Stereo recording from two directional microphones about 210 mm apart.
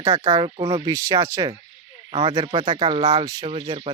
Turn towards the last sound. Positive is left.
turn(degrees=-25)  # may be behind; listen again after turning